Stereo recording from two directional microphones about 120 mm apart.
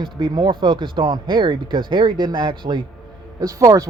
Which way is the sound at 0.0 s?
40° right (ahead or behind).